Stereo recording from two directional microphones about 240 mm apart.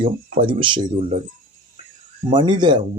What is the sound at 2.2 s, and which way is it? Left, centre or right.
Speech, centre.